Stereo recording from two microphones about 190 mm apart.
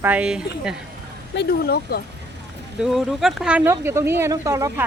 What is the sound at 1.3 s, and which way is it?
Speech, 55° left (ahead or behind).